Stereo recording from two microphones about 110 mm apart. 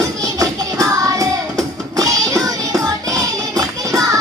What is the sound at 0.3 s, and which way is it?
Music, 30° right (ahead or behind).